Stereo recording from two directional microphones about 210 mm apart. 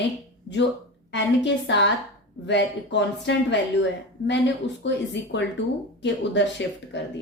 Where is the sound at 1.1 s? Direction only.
55° left (ahead or behind).